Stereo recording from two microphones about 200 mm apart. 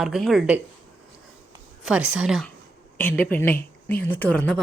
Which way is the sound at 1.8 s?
5° right (ahead or behind).